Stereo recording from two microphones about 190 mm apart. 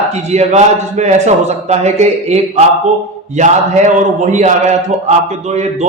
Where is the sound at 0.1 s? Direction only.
35° right (ahead or behind).